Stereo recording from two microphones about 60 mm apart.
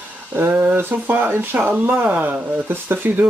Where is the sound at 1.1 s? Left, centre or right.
Right.